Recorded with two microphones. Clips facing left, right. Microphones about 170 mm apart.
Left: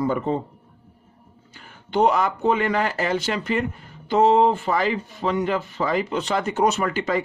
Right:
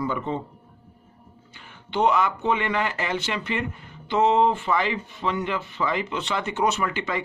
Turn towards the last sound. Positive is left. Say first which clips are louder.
# left 4 dB
turn(degrees=40)  # may be behind; listen again after turning